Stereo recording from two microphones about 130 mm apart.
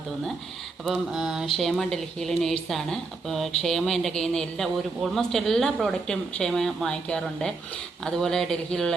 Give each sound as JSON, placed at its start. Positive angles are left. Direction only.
{"t": 0.9, "sound": "speech", "side_deg": -5}